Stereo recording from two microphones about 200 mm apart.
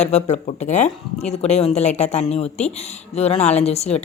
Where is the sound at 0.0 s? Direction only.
35° left (ahead or behind).